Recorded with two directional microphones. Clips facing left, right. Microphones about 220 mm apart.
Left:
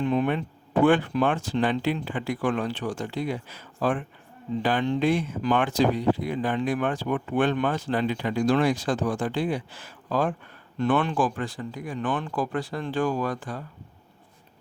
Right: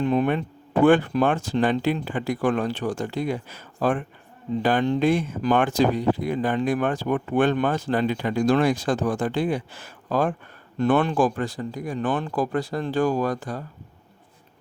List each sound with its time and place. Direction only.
0.0 s speech: 40° right (ahead or behind)